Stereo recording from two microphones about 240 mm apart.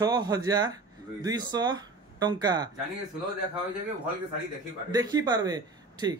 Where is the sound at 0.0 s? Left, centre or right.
Centre.